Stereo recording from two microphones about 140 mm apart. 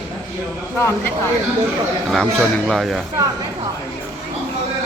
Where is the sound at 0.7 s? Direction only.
15° left (ahead or behind).